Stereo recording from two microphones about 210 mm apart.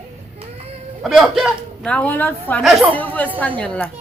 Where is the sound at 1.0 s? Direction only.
Centre (ahead or behind).